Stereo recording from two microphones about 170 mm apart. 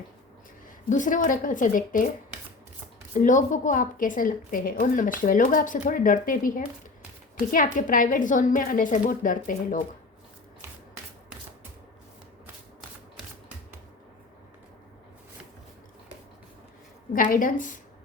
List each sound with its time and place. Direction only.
0.9 s a woman's voice: 50° left (ahead or behind)
3.2 s a woman's voice: 50° left (ahead or behind)
17.2 s a woman's voice: 55° left (ahead or behind)